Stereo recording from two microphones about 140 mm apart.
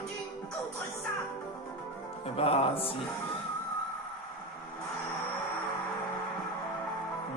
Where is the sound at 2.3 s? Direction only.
40° left (ahead or behind).